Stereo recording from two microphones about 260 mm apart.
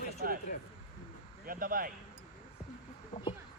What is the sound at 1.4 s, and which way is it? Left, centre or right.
Speech, right.